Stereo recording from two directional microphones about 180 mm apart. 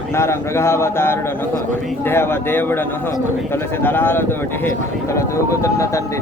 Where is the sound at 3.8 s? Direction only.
10° left (ahead or behind).